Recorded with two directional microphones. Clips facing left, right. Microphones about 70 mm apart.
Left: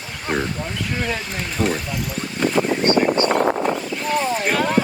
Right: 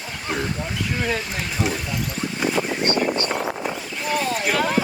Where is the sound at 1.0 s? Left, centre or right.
Centre.